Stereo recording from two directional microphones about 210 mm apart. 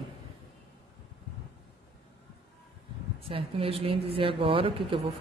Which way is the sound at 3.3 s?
25° right (ahead or behind).